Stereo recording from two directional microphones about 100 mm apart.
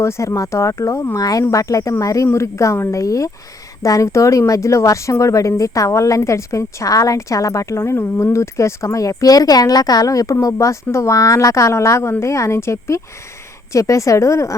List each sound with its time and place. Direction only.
0.0 s a woman's voice: 30° left (ahead or behind)